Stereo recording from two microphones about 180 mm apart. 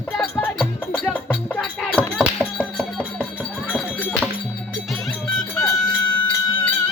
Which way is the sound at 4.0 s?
10° left (ahead or behind).